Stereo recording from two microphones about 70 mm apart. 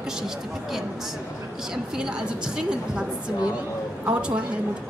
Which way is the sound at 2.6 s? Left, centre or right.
Centre.